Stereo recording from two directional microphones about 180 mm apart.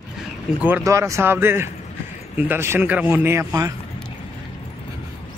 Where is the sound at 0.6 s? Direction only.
10° right (ahead or behind).